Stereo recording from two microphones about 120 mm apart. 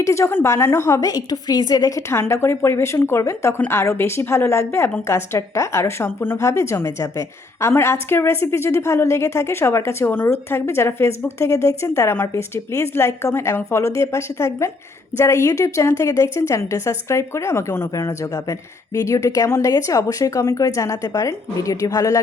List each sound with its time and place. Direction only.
0.0 s a woman's voice: 25° left (ahead or behind)